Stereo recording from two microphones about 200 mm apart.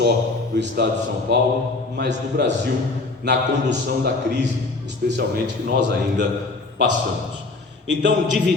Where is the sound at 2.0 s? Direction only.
55° right (ahead or behind).